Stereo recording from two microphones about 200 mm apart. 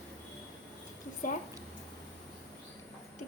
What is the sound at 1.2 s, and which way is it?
Speech, 45° left (ahead or behind).